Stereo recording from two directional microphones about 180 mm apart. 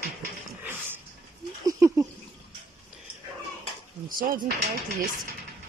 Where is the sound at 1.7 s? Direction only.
15° right (ahead or behind).